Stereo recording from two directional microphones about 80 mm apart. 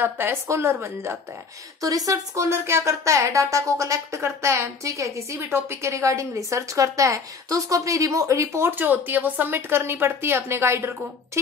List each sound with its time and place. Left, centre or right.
0.0 s speech: right
1.8 s speech: right
8.7 s speech: right